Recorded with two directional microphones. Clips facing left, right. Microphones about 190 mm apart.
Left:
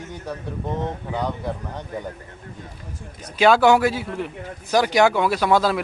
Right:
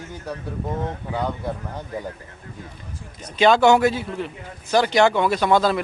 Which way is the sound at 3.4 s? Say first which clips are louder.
Even; 5° left (ahead or behind).